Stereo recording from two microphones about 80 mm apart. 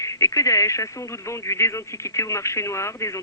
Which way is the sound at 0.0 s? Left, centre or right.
Left.